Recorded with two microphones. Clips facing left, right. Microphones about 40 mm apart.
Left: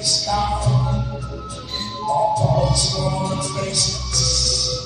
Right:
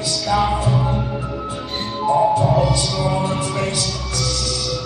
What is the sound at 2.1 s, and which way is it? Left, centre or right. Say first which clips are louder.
Music: right 3 dB; right.